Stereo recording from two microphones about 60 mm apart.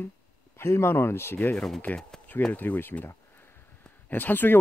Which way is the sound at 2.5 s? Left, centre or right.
Left.